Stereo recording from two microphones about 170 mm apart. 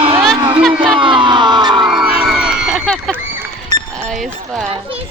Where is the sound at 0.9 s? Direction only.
30° right (ahead or behind).